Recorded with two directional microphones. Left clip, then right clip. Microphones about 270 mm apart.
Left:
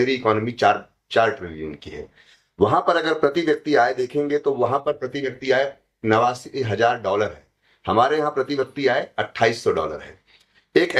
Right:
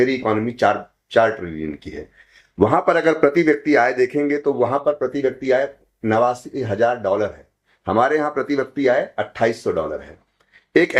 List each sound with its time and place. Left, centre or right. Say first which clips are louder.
0.0 s speech: right 1 dB; right
2.6 s speech: right 2 dB; right